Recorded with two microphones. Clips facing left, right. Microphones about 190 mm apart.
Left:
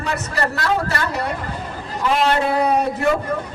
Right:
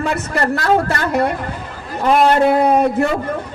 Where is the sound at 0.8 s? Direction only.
55° right (ahead or behind).